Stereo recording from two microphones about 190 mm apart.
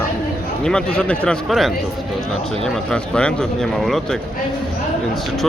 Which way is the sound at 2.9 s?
5° left (ahead or behind).